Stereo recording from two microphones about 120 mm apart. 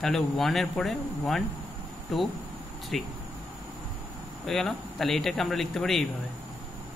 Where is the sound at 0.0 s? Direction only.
5° left (ahead or behind).